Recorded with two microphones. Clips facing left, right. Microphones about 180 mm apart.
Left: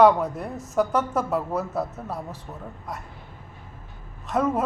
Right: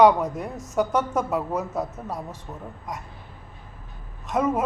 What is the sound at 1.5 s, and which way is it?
Speech, 15° right (ahead or behind).